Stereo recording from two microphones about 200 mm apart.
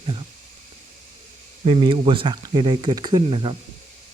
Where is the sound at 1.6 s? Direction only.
30° right (ahead or behind).